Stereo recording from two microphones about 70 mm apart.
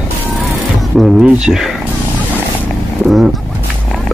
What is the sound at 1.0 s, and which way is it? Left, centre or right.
Speech, centre.